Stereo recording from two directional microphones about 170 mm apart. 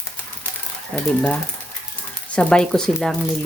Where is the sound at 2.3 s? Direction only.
5° left (ahead or behind).